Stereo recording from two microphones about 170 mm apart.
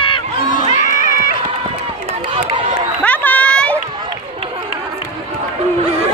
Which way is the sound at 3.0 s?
10° left (ahead or behind).